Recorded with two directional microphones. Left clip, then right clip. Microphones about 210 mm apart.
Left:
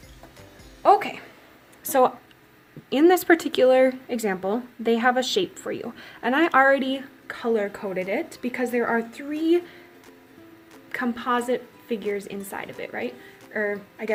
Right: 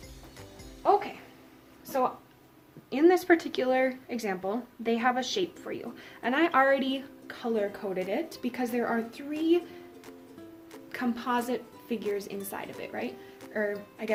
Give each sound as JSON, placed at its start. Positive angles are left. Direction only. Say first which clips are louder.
{"t": 0.8, "sound": "music", "louder": "left 7 dB", "side_deg": 25}
{"t": 2.9, "sound": "speech", "louder": "left 5 dB", "side_deg": 30}
{"t": 10.9, "sound": "a woman's voice", "louder": "left 5 dB", "side_deg": 5}